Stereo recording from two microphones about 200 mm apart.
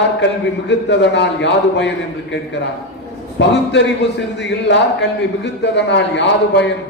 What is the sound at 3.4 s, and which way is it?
A man's voice, 60° left (ahead or behind).